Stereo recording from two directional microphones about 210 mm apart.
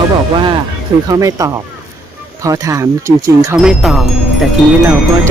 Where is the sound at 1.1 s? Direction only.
15° right (ahead or behind).